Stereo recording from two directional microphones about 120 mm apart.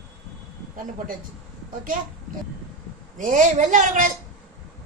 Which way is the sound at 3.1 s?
90° right.